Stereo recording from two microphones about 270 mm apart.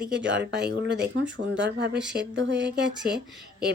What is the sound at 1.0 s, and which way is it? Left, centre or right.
Speech, right.